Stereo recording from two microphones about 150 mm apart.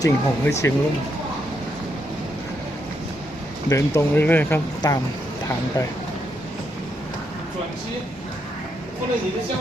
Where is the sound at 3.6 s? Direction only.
20° left (ahead or behind).